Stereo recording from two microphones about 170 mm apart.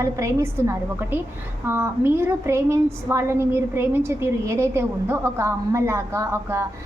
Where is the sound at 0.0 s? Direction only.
15° right (ahead or behind).